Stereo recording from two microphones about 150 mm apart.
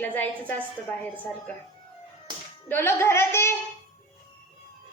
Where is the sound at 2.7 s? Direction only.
15° left (ahead or behind).